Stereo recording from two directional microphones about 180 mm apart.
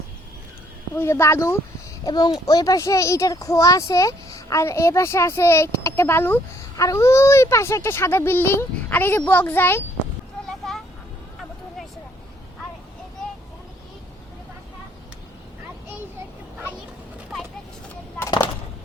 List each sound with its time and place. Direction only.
0.9 s a child's voice: 15° left (ahead or behind)
10.6 s vehicle: 5° left (ahead or behind)
18.2 s a sound: 15° left (ahead or behind)